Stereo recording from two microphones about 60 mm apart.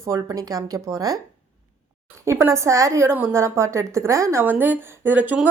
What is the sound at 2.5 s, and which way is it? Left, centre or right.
Speech, right.